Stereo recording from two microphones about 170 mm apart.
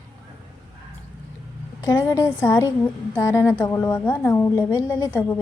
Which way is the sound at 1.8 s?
20° left (ahead or behind).